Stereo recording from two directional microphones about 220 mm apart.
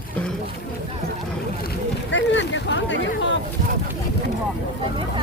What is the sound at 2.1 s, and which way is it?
Speech, 55° left (ahead or behind).